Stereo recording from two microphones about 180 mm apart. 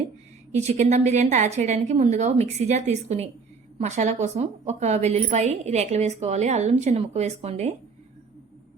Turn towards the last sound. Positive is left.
turn(degrees=-35)  # may be behind; listen again after turning